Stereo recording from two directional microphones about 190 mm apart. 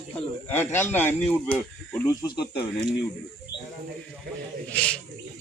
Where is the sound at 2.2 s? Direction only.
20° left (ahead or behind).